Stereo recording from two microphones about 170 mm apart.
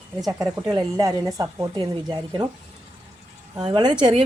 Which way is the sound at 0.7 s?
20° right (ahead or behind).